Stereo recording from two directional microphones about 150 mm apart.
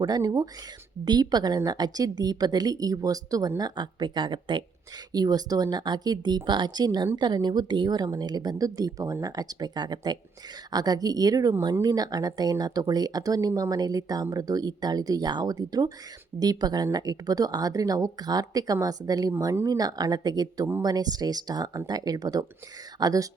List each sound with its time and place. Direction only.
0.0 s speech: 25° right (ahead or behind)